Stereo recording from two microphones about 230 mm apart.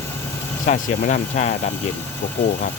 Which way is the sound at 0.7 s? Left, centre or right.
Left.